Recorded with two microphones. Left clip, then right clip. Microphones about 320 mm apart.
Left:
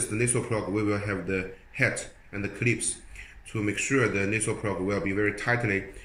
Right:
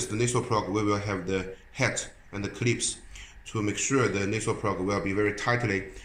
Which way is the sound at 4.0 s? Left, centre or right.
Centre.